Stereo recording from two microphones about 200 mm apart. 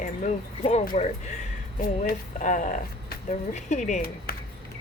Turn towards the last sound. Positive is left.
turn(degrees=40)  # may be behind; listen again after turning